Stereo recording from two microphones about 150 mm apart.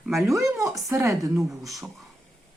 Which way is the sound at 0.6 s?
Centre (ahead or behind).